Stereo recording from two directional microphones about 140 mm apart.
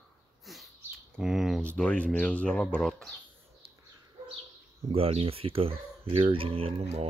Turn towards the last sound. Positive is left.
turn(degrees=-45)  # may be behind; listen again after turning